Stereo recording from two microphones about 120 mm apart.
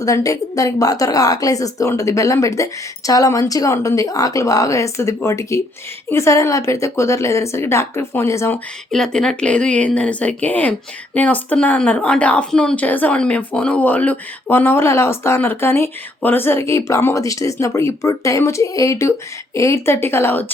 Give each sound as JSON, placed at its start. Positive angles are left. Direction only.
{"t": 0.0, "sound": "a woman's voice", "side_deg": 30}
{"t": 8.9, "sound": "a woman's voice", "side_deg": 5}